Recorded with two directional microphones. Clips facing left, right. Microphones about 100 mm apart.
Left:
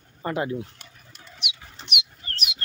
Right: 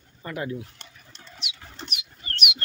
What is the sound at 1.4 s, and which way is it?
Bird, 60° left (ahead or behind).